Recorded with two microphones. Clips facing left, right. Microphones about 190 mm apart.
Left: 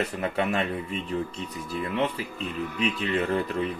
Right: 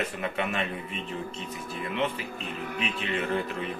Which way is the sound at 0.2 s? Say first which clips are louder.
Left 5 dB; 35° left (ahead or behind).